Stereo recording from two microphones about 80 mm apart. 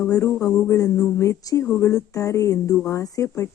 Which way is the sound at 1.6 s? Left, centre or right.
Left.